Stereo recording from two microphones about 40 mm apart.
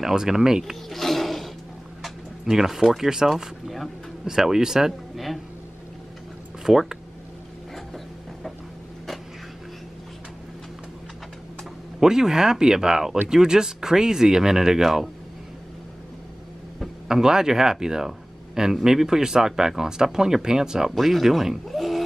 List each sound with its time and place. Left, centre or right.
0.0 s speech: centre
0.8 s roaring cats: centre
2.4 s speech: centre
3.7 s speech: centre
4.3 s speech: centre
6.6 s speech: centre
12.0 s speech: centre
17.1 s speech: centre
20.9 s speech: centre